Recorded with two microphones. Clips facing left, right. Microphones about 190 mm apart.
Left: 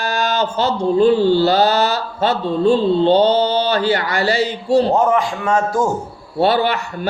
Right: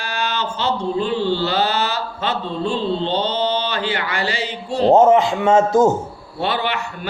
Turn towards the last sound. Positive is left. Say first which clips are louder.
# left 6 dB
turn(degrees=40)  # may be behind; listen again after turning